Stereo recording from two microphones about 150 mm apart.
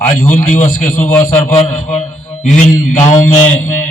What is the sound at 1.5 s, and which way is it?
Mantra, 55° left (ahead or behind).